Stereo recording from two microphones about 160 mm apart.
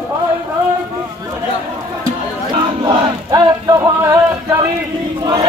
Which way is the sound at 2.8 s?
20° right (ahead or behind).